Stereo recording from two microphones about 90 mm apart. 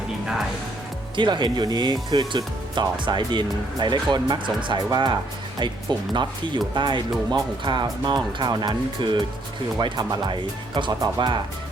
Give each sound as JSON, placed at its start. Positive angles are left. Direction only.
{"t": 1.1, "sound": "speech", "side_deg": -60}